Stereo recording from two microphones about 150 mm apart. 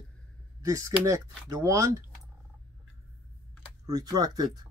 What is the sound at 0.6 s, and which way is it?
Speech, 20° right (ahead or behind).